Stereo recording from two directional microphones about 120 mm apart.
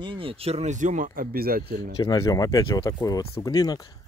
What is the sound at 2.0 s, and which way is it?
Speech, 35° left (ahead or behind).